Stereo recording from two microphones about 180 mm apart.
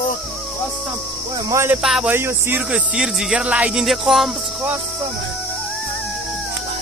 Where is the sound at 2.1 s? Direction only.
10° right (ahead or behind).